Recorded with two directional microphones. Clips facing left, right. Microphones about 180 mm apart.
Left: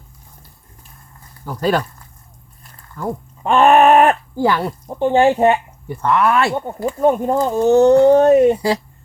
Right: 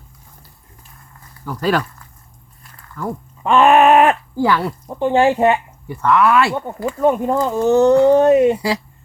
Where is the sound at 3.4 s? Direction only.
40° left (ahead or behind).